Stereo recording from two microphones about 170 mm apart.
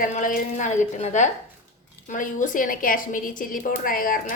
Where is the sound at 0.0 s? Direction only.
50° left (ahead or behind).